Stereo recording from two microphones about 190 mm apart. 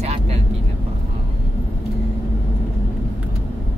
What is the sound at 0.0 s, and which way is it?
Vehicle, 35° right (ahead or behind).